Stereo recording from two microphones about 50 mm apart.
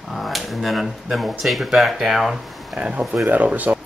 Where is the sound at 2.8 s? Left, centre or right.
Right.